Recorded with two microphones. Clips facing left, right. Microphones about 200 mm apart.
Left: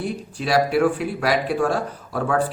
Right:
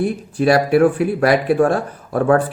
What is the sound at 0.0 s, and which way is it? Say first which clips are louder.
Speech: right 9 dB; 55° right (ahead or behind).